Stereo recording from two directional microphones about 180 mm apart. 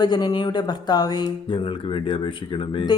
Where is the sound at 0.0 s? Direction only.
20° left (ahead or behind).